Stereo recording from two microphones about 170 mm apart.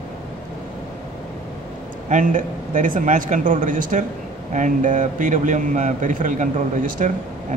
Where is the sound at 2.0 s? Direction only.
50° right (ahead or behind).